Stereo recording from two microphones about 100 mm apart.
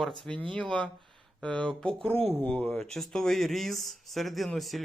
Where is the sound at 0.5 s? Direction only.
10° left (ahead or behind).